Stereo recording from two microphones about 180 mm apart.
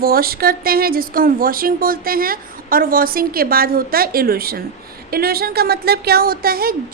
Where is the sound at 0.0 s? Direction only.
55° right (ahead or behind).